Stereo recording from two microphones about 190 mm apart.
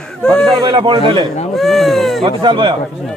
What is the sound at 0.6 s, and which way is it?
Speech, 25° right (ahead or behind).